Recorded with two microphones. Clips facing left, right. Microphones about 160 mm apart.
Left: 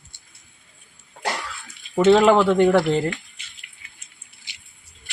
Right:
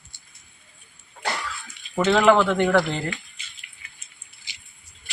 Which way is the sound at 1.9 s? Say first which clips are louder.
Left 3 dB; 30° left (ahead or behind).